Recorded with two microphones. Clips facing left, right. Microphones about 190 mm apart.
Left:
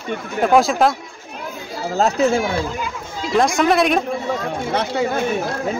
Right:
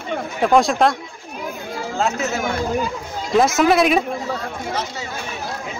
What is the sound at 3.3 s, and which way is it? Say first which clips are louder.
Speech: right 1 dB; 5° right (ahead or behind).